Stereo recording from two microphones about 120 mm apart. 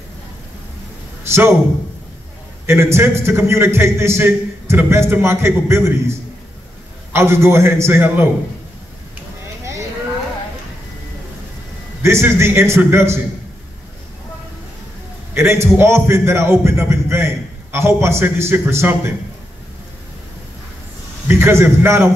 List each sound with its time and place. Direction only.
2.6 s a man's voice: 20° right (ahead or behind)
12.0 s a man's voice: 20° right (ahead or behind)
15.3 s a man's voice: 20° right (ahead or behind)
21.3 s a man's voice: 20° right (ahead or behind)